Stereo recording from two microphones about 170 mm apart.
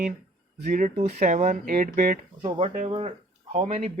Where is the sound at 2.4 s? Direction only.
35° right (ahead or behind).